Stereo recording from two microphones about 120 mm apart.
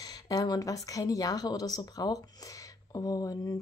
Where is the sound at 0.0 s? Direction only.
35° left (ahead or behind).